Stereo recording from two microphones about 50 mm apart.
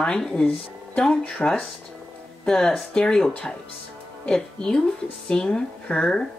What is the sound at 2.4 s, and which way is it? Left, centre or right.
Speech, centre.